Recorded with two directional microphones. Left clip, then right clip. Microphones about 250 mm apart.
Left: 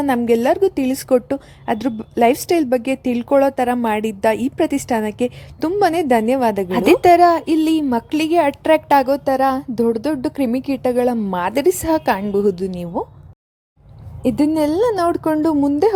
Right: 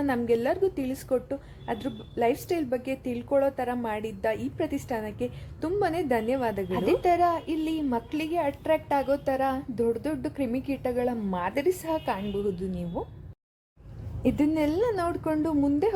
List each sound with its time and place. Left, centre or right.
0.0 s a woman's voice: left
14.2 s a woman's voice: left